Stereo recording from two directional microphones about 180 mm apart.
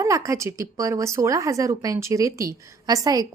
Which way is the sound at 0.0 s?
15° right (ahead or behind).